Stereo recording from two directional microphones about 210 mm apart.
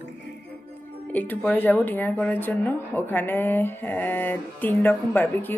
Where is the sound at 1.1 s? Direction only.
10° left (ahead or behind).